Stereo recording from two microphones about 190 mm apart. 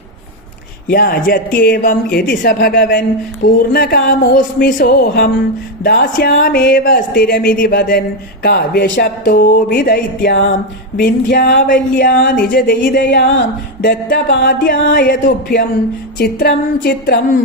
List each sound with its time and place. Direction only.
0.9 s speech: 50° left (ahead or behind)